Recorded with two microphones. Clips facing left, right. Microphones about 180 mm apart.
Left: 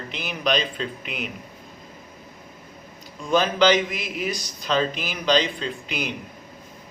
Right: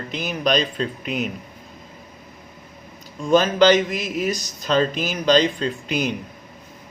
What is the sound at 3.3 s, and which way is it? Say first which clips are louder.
Speech: right 4 dB; 45° right (ahead or behind).